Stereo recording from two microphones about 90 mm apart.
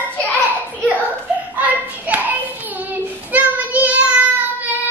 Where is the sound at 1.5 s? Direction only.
20° right (ahead or behind).